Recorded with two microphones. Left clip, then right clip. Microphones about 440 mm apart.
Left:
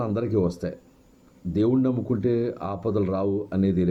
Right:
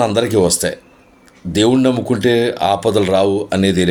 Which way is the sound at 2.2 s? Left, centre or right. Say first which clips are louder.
Right 13 dB; centre.